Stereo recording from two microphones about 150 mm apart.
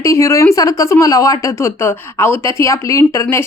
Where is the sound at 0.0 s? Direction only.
20° left (ahead or behind).